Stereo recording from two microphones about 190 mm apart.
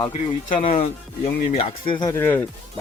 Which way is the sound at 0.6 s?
35° left (ahead or behind).